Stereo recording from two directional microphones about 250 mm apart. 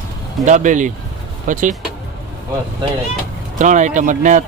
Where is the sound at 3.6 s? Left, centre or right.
Right.